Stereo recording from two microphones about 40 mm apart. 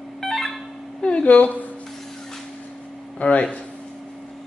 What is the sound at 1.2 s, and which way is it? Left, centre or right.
Speech, left.